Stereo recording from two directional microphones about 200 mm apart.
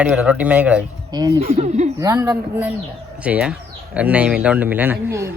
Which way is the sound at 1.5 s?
35° right (ahead or behind).